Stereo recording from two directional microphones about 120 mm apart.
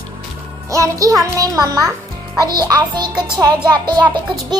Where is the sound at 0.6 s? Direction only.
25° right (ahead or behind).